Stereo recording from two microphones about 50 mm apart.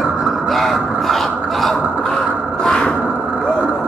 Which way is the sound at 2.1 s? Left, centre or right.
Centre.